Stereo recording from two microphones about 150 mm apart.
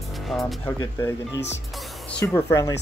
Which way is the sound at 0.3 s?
Centre (ahead or behind).